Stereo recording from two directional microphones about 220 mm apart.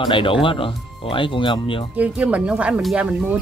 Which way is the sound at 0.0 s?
20° left (ahead or behind).